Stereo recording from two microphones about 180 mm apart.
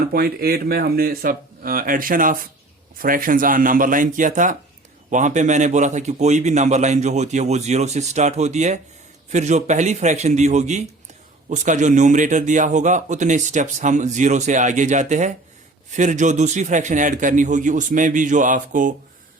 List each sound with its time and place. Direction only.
0.1 s a man's voice: 55° right (ahead or behind)